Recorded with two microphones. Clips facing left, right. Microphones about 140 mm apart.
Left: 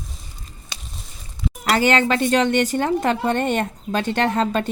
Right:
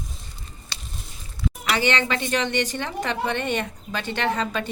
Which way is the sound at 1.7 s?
45° left (ahead or behind).